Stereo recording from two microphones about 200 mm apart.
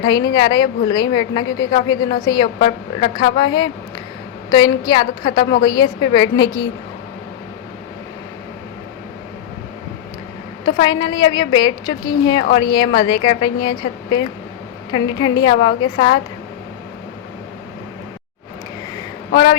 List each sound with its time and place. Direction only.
0.0 s a woman's voice: 20° left (ahead or behind)
4.9 s a woman's voice: 20° left (ahead or behind)
10.7 s a woman's voice: 20° left (ahead or behind)